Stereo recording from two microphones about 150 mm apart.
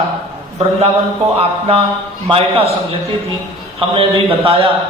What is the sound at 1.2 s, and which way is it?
A man's voice, 40° right (ahead or behind).